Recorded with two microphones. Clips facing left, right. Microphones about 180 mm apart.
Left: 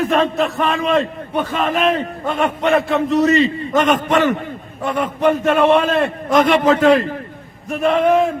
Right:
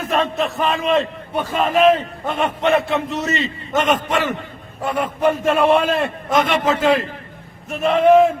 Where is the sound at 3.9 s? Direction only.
25° left (ahead or behind).